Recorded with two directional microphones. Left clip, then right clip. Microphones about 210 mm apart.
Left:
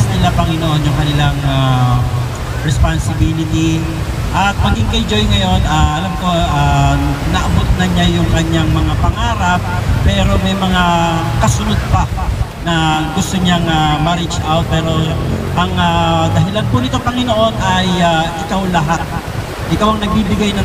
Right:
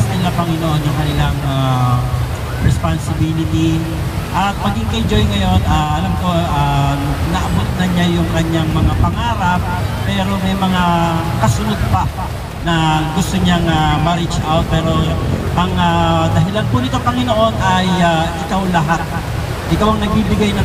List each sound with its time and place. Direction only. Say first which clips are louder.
4.4 s speech: left 3 dB; 20° left (ahead or behind)
12.6 s speech: left 1 dB; 20° left (ahead or behind)